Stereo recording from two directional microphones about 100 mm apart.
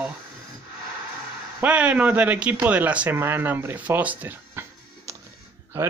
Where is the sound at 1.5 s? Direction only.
10° right (ahead or behind).